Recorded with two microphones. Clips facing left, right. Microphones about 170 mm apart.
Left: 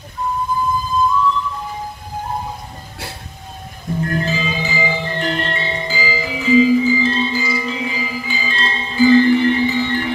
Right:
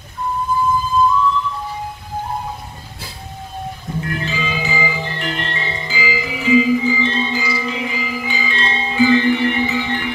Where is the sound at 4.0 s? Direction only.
40° left (ahead or behind).